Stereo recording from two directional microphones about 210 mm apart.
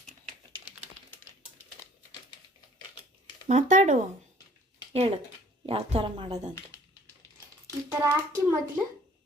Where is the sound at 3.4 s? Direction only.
35° right (ahead or behind).